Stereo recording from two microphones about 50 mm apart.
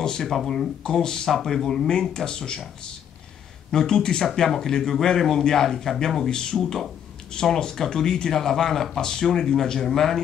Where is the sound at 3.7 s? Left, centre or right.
Centre.